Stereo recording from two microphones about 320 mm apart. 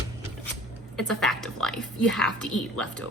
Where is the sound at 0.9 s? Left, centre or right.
Centre.